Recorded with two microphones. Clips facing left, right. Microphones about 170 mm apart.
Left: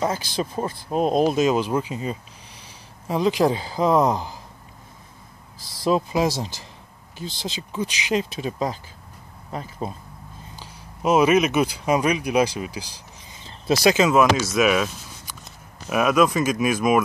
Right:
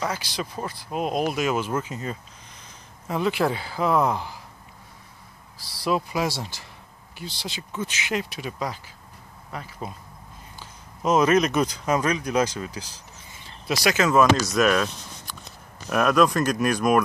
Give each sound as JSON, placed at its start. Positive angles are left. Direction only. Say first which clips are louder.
{"t": 0.0, "sound": "speech", "louder": "left 5 dB", "side_deg": 30}
{"t": 5.6, "sound": "a sound", "louder": "left 1 dB", "side_deg": 50}
{"t": 5.9, "sound": "speech", "louder": "left 4 dB", "side_deg": 25}
{"t": 7.4, "sound": "speech", "louder": "left 4 dB", "side_deg": 20}
{"t": 11.0, "sound": "speech", "louder": "left 2 dB", "side_deg": 10}
{"t": 13.4, "sound": "a sound", "louder": "left 6 dB", "side_deg": 25}
{"t": 14.0, "sound": "speech", "louder": "left 1 dB", "side_deg": 5}
{"t": 15.9, "sound": "speech", "louder": "left 1 dB", "side_deg": 5}